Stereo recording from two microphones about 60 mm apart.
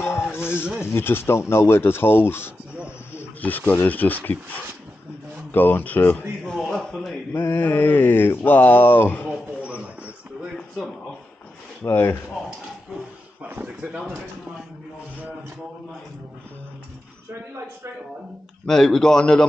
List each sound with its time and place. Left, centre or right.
0.0 s a sound: left
0.9 s speech: left
5.5 s speech: left
6.4 s speech: centre
7.3 s speech: left
9.6 s a sound: right
11.8 s speech: left
13.4 s speech: right
18.7 s speech: centre